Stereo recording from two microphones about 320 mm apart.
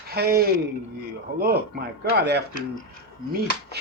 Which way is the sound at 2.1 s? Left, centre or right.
Right.